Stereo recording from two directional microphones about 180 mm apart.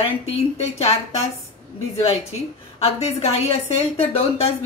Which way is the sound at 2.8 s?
35° left (ahead or behind).